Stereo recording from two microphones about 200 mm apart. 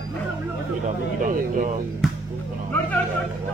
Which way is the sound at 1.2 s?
40° right (ahead or behind).